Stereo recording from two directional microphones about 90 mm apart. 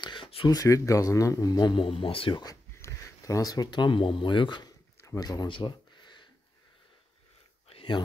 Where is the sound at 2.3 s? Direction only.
45° left (ahead or behind).